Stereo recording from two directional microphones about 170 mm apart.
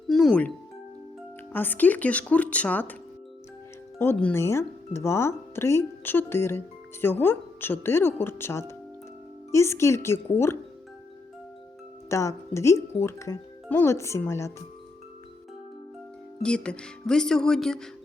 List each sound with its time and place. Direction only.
0.1 s music: 5° left (ahead or behind)
1.5 s speech: 10° left (ahead or behind)
3.9 s speech: 15° left (ahead or behind)
12.0 s speech: 15° left (ahead or behind)
16.4 s speech: 5° left (ahead or behind)